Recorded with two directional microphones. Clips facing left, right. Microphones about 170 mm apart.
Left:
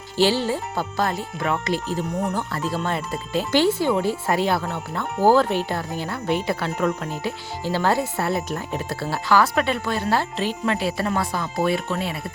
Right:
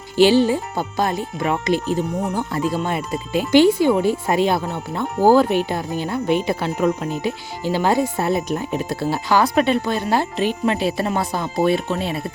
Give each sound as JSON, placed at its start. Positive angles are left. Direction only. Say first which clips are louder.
{"t": 0.2, "sound": "speech", "louder": "right 6 dB", "side_deg": -15}